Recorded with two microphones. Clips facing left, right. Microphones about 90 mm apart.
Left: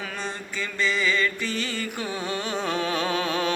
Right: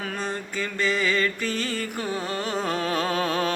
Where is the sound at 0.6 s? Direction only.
45° right (ahead or behind).